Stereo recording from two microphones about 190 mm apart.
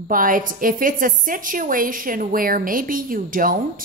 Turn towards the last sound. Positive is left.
turn(degrees=-45)  # may be behind; listen again after turning